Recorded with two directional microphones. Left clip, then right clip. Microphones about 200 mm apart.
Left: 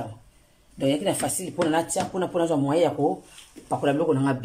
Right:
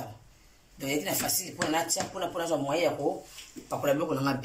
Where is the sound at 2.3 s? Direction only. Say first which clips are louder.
Left 6 dB; 45° left (ahead or behind).